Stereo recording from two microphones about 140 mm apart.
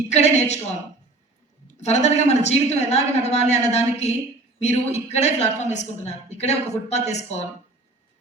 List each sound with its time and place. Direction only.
0.1 s speech: 55° left (ahead or behind)
1.6 s a woman's voice: 55° left (ahead or behind)